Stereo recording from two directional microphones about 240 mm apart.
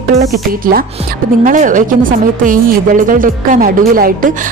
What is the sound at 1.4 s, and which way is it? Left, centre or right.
Speech, right.